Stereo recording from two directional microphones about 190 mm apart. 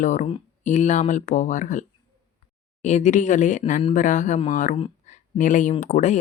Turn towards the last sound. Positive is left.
turn(degrees=40)  # may be behind; listen again after turning